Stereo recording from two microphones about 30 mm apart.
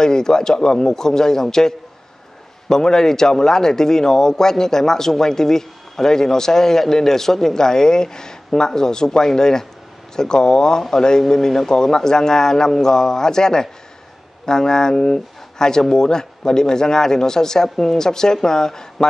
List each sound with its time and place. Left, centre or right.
0.0 s a man's voice: left